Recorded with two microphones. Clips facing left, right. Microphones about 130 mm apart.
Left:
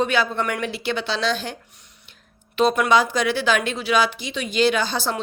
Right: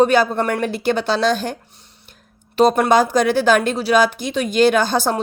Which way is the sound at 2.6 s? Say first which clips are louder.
Right 4 dB; 40° right (ahead or behind).